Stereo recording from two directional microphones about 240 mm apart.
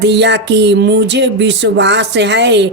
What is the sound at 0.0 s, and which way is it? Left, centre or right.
Speech, right.